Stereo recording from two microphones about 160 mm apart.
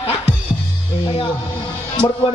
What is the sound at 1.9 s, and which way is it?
Speech, 35° left (ahead or behind).